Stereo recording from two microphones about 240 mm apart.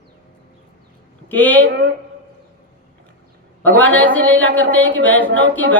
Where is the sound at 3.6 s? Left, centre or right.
Centre.